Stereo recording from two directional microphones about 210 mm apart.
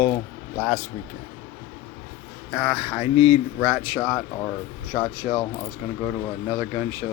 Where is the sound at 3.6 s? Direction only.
10° right (ahead or behind).